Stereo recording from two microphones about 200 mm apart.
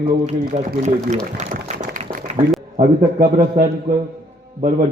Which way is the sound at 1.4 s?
35° right (ahead or behind).